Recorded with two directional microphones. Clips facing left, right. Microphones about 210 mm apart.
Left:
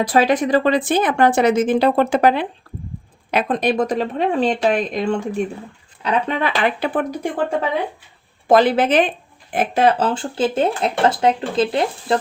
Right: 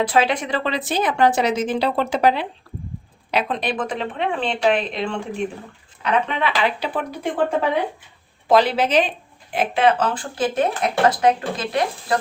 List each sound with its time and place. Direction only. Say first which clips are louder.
0.0 s speech: left 3 dB; 45° left (ahead or behind)
8.4 s speech: left 3 dB; 50° left (ahead or behind)
10.0 s speech: left 3 dB; 30° left (ahead or behind)